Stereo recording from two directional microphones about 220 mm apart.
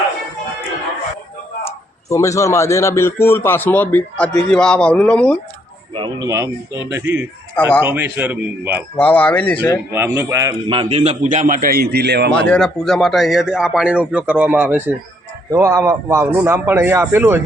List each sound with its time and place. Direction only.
1.6 s a man's voice: 15° left (ahead or behind)
5.9 s speech: 20° right (ahead or behind)
7.6 s a man's voice: 20° left (ahead or behind)
7.9 s speech: 10° right (ahead or behind)
9.0 s a man's voice: 5° left (ahead or behind)
9.9 s a man's voice: 10° right (ahead or behind); by 12.3 s 50° right (ahead or behind)
12.3 s speech: 5° left (ahead or behind)